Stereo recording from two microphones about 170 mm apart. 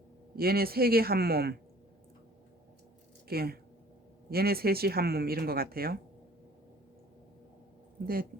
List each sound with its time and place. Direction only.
0.3 s speech: 65° right (ahead or behind)
3.2 s speech: 65° right (ahead or behind)
8.0 s speech: 60° right (ahead or behind)